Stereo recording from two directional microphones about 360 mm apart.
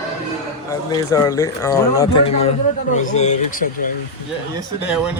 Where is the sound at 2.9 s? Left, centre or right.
Centre.